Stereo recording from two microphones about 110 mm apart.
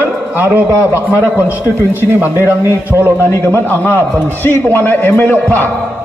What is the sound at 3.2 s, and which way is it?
A man's voice, 20° left (ahead or behind).